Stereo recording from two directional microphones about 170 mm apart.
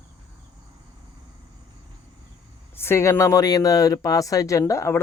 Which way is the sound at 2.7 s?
15° left (ahead or behind).